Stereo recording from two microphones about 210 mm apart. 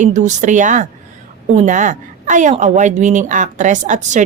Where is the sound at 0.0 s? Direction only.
35° right (ahead or behind).